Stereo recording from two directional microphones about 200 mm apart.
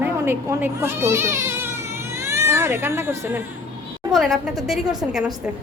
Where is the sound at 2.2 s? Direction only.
15° right (ahead or behind).